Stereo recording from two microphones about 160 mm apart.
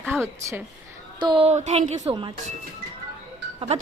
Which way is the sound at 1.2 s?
30° right (ahead or behind).